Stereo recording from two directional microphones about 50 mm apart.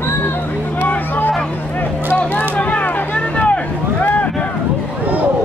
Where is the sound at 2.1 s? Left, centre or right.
Left.